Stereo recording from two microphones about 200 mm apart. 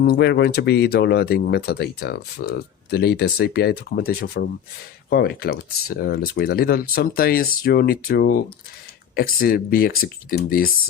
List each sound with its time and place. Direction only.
0.0 s speech: 55° left (ahead or behind)